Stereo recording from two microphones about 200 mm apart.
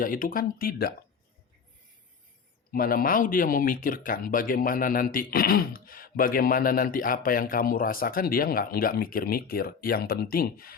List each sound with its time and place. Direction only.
0.0 s speech: 45° left (ahead or behind)
2.7 s speech: 45° left (ahead or behind)